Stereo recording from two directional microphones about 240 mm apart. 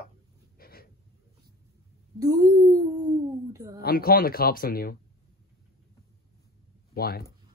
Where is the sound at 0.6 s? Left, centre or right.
Left.